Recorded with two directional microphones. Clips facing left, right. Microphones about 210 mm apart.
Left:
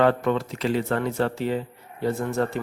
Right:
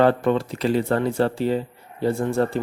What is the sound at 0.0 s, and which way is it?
Speech, 30° right (ahead or behind).